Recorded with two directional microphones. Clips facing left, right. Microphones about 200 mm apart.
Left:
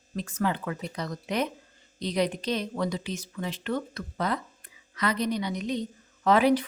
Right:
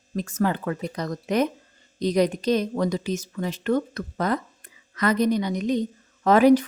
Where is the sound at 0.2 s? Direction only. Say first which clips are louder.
Right 4 dB; 45° right (ahead or behind).